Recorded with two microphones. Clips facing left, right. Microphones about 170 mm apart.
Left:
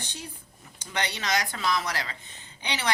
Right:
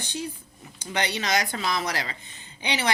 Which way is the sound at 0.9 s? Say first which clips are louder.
Right 3 dB; 15° right (ahead or behind).